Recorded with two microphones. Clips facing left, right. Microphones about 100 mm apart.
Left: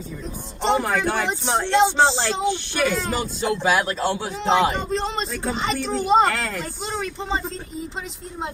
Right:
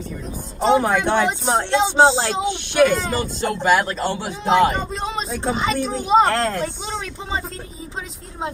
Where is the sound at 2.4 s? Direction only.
20° right (ahead or behind).